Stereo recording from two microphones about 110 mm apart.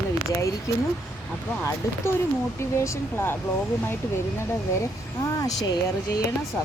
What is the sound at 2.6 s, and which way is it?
Speech, 25° left (ahead or behind).